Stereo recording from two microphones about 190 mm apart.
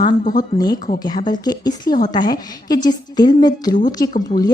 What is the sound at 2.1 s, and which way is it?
A woman's voice, 20° left (ahead or behind).